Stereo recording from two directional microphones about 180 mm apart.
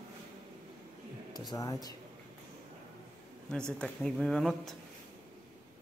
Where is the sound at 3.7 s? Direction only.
5° left (ahead or behind).